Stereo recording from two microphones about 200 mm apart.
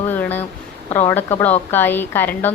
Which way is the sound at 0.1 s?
10° left (ahead or behind).